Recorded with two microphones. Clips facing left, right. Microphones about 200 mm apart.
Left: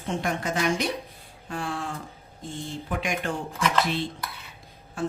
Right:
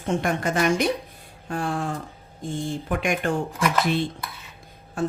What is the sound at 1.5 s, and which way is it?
Speech, 40° right (ahead or behind).